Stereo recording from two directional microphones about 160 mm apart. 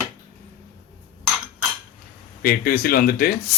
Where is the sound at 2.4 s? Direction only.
70° left (ahead or behind).